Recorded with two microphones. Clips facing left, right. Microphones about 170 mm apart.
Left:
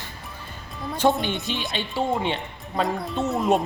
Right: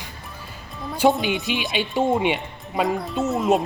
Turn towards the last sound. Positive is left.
turn(degrees=0)  # may be behind; listen again after turning